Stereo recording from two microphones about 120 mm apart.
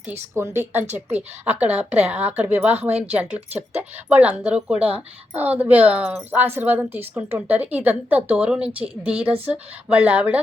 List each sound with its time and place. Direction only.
0.0 s a woman's voice: 20° right (ahead or behind)